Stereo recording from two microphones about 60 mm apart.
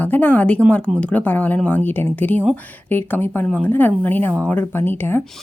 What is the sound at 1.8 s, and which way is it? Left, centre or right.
A woman's voice, left.